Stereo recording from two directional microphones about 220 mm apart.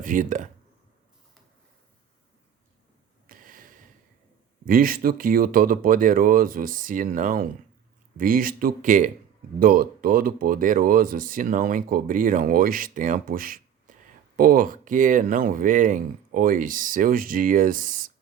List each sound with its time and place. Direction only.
0.0 s speech: 35° right (ahead or behind)
3.2 s a sound: 40° right (ahead or behind)
4.6 s speech: 40° right (ahead or behind)